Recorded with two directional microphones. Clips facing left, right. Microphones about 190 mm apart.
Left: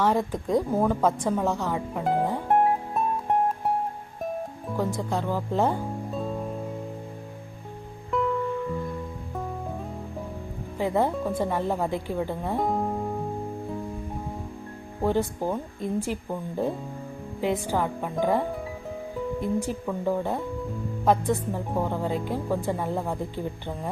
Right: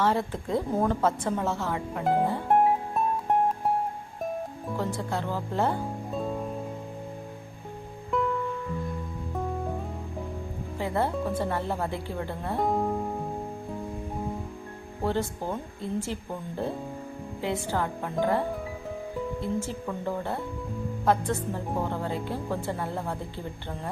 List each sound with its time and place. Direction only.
0.0 s a woman's voice: 15° left (ahead or behind)
4.8 s a woman's voice: 15° left (ahead or behind)
8.1 s music: centre (ahead or behind)
10.8 s a woman's voice: 15° left (ahead or behind)
15.0 s a woman's voice: 15° left (ahead or behind)
17.4 s a woman's voice: 15° left (ahead or behind)